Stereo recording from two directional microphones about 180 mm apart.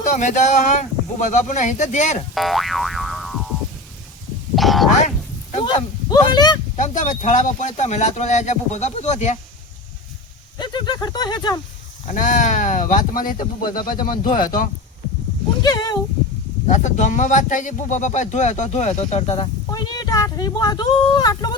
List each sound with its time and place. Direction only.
0.0 s speech: 40° left (ahead or behind)
2.3 s boing: centre (ahead or behind)
4.5 s speech: centre (ahead or behind)
5.6 s speech: 25° left (ahead or behind)
6.7 s speech: 45° left (ahead or behind)
10.6 s speech: 25° left (ahead or behind)
12.0 s speech: 45° left (ahead or behind)
15.6 s speech: 20° left (ahead or behind)
16.6 s speech: 40° left (ahead or behind)
19.7 s speech: 20° left (ahead or behind)